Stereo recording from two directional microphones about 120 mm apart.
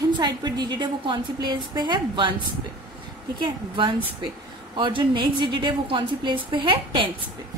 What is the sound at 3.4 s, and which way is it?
A woman's voice, 45° right (ahead or behind).